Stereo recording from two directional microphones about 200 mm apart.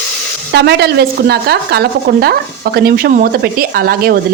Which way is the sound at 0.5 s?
55° right (ahead or behind).